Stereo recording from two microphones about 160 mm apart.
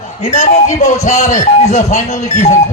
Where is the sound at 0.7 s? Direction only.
20° left (ahead or behind).